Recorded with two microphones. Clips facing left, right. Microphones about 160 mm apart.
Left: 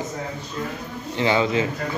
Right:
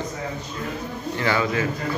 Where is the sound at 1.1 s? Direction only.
20° left (ahead or behind).